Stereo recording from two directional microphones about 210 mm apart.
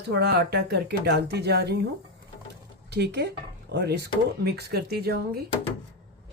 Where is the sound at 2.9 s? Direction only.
50° right (ahead or behind).